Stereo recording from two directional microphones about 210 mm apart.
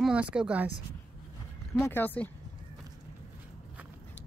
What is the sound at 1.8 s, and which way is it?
Speech, 10° left (ahead or behind).